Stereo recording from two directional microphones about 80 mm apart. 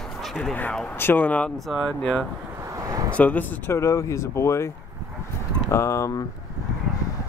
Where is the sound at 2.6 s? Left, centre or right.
Right.